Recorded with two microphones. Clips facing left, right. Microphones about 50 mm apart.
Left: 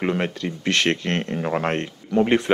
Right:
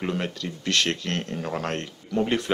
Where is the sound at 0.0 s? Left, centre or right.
Left.